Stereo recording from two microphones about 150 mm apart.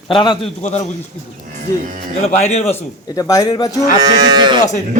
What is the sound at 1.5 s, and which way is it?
Speech, 60° right (ahead or behind).